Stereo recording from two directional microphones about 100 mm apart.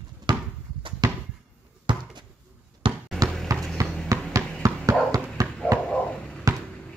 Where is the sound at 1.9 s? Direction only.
55° right (ahead or behind).